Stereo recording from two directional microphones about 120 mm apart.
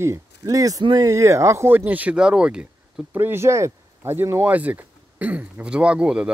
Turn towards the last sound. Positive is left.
turn(degrees=-10)  # may be behind; listen again after turning